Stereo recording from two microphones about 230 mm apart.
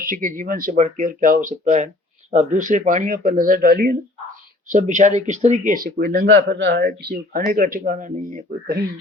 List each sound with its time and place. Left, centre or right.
0.0 s speech: right